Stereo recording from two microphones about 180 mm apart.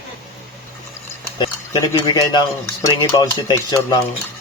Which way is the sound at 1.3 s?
25° left (ahead or behind).